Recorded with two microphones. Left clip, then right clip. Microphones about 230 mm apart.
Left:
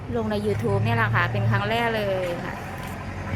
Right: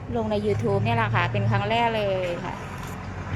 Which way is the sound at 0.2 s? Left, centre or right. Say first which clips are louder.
Right 1 dB; centre.